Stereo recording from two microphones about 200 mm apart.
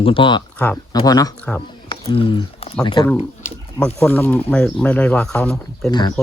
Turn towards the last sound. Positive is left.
turn(degrees=5)  # may be behind; listen again after turning